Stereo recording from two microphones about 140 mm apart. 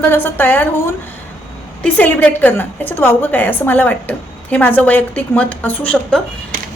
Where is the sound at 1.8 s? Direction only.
10° left (ahead or behind).